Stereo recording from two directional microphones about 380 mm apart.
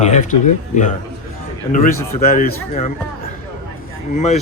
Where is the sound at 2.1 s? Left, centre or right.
Left.